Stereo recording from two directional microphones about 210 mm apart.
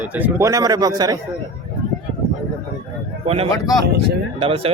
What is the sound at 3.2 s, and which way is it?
Speech, 30° right (ahead or behind).